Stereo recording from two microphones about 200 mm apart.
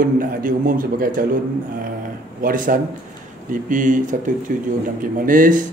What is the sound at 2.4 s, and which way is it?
A man's voice, 45° right (ahead or behind).